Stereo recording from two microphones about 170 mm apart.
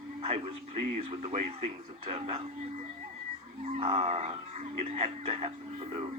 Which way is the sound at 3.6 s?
40° right (ahead or behind).